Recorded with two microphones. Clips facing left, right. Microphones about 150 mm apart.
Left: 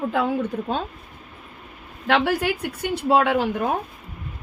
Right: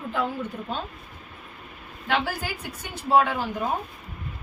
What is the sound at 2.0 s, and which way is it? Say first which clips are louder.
Speech: left 7 dB; 85° left.